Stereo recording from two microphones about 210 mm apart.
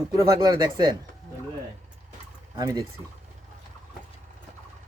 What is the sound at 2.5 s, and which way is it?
Speech, 15° right (ahead or behind).